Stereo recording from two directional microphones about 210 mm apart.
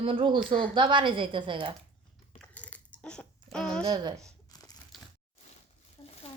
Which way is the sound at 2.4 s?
5° left (ahead or behind).